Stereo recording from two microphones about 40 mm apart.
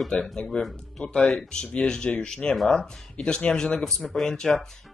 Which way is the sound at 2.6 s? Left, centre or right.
Centre.